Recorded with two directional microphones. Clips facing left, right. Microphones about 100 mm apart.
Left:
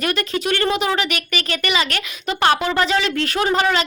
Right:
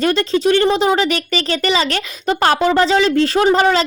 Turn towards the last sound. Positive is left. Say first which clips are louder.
# right 5 dB
turn(degrees=-35)  # may be behind; listen again after turning